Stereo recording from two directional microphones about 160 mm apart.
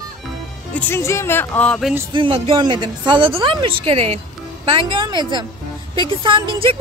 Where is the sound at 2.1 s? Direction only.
35° right (ahead or behind).